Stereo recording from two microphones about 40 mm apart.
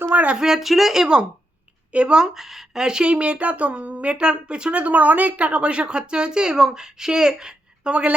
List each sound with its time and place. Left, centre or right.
0.1 s speech: right
0.3 s speech: centre
1.9 s speech: right
2.3 s speech: centre; by 4.8 s right
4.8 s speech: right